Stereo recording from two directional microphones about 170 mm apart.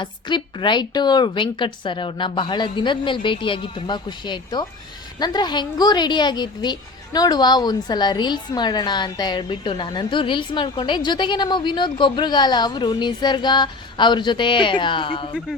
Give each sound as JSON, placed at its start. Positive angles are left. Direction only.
{"t": 0.0, "sound": "a woman's voice", "side_deg": 30}